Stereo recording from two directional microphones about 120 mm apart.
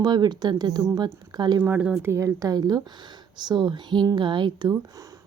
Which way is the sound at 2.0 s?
20° right (ahead or behind).